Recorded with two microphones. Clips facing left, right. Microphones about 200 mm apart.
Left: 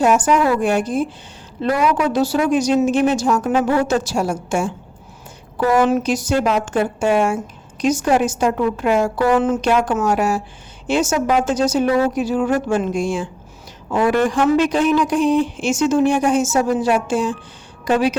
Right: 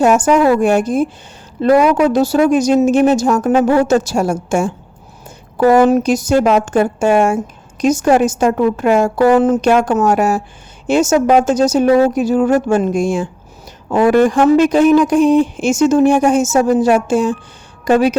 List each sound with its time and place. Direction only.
0.0 s speech: 45° right (ahead or behind)